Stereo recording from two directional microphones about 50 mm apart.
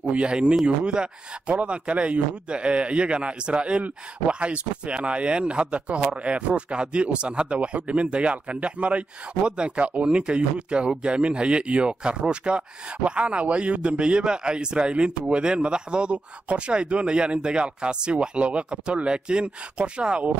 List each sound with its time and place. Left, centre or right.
0.0 s speech: right